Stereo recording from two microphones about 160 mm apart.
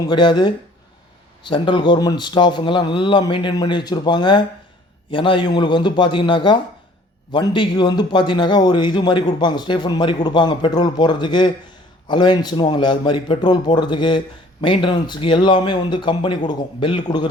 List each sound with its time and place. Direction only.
0.1 s a man's voice: 30° left (ahead or behind)